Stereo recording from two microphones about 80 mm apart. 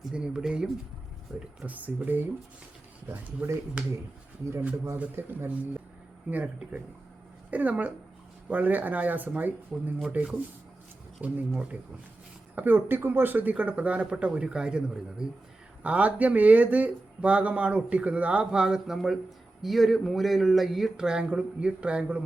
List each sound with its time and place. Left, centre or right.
0.1 s a man's voice: centre
1.6 s speech: centre
3.1 s speech: right
5.1 s speech: right
6.3 s a man's voice: centre